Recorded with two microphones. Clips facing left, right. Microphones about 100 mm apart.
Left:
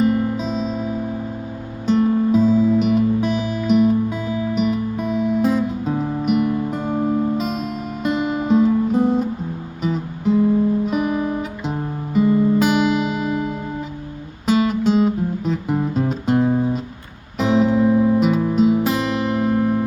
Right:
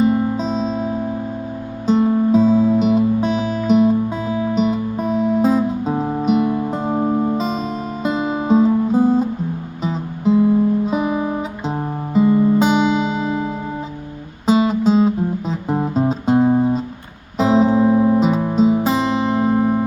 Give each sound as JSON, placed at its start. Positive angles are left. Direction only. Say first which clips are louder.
{"t": 0.0, "sound": "music", "louder": "right 2 dB", "side_deg": -30}
{"t": 10.8, "sound": "guitar", "louder": "right 1 dB", "side_deg": -30}
{"t": 12.5, "sound": "music", "louder": "right 2 dB", "side_deg": -30}